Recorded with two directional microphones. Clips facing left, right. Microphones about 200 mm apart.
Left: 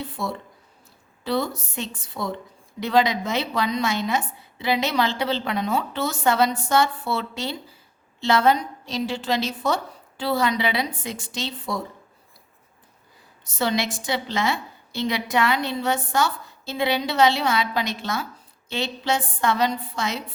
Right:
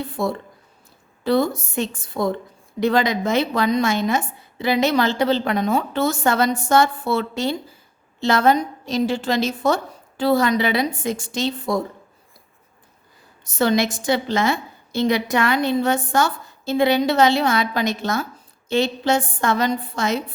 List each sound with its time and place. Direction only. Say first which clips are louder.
0.0 s a woman's voice: right 6 dB; 50° right (ahead or behind)
13.4 s a woman's voice: right 6 dB; 50° right (ahead or behind)